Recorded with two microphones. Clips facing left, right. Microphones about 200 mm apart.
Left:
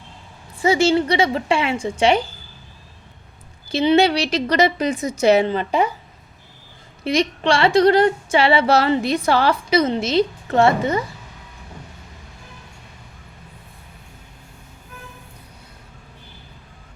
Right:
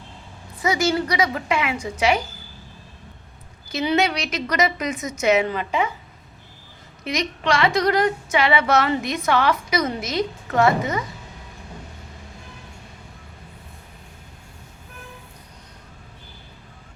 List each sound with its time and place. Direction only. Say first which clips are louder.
0.6 s a woman's voice: left 5 dB; 30° left (ahead or behind)
3.7 s a woman's voice: left 6 dB; 30° left (ahead or behind)
7.0 s a woman's voice: left 6 dB; 30° left (ahead or behind)